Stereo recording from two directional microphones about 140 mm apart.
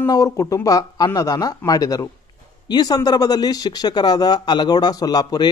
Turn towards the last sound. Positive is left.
turn(degrees=30)  # may be behind; listen again after turning